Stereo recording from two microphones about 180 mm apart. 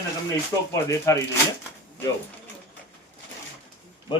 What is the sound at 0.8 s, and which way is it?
Speech, 15° left (ahead or behind).